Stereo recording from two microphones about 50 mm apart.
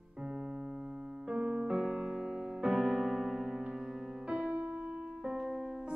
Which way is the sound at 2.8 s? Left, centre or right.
Centre.